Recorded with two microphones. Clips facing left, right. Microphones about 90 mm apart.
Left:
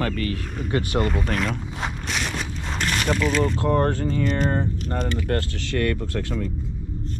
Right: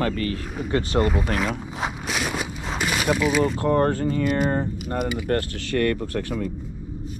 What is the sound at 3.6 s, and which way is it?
Speech, 20° right (ahead or behind).